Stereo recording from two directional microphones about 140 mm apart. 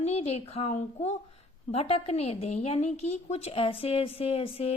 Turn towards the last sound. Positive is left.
turn(degrees=45)  # may be behind; listen again after turning